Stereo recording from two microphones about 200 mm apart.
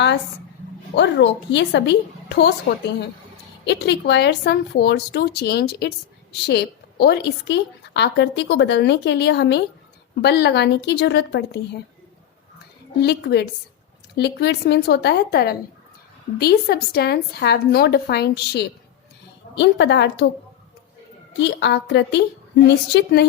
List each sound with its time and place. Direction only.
0.9 s a woman's voice: 65° left (ahead or behind)
2.7 s a woman's voice: 55° left (ahead or behind)
13.0 s a woman's voice: 55° left (ahead or behind)
21.3 s a woman's voice: 60° left (ahead or behind)